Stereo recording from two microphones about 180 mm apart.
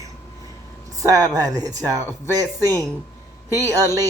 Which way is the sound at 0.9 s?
20° right (ahead or behind).